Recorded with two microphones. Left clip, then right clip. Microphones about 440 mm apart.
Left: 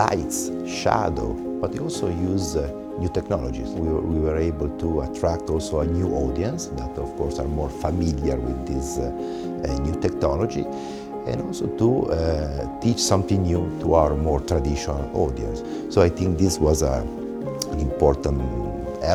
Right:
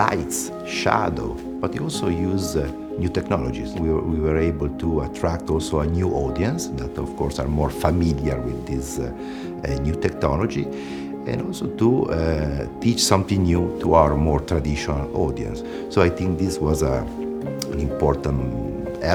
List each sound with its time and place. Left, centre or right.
0.9 s speech: left
1.6 s speech: left
7.8 s speech: left
11.8 s speech: left
18.0 s speech: left